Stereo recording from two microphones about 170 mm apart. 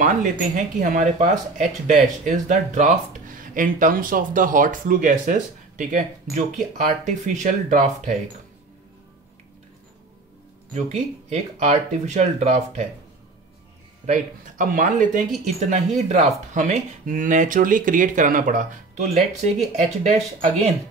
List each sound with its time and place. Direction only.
0.7 s speech: 50° right (ahead or behind)
10.7 s speech: 40° right (ahead or behind)
14.0 s speech: 50° right (ahead or behind)